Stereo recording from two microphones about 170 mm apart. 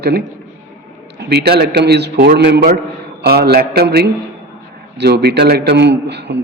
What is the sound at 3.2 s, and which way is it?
A man's voice, 65° right (ahead or behind).